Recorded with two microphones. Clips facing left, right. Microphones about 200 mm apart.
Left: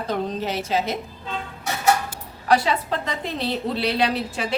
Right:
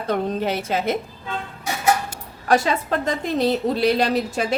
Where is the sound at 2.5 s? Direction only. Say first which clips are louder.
Right 1 dB; 50° right (ahead or behind).